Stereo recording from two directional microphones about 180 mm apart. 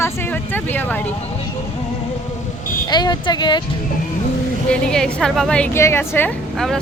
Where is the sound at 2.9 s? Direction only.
25° left (ahead or behind).